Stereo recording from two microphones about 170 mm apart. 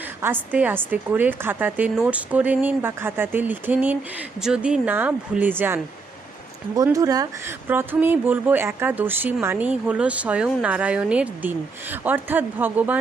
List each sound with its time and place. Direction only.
0.2 s a woman's voice: 10° right (ahead or behind)
6.8 s a woman's voice: 20° right (ahead or behind)